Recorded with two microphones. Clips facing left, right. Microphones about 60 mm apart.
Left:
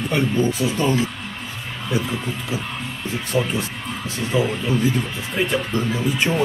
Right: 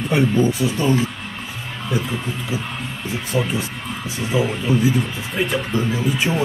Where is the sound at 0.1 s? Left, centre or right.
Centre.